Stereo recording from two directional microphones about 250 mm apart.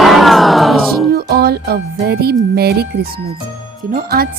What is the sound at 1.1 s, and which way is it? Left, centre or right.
Music, right.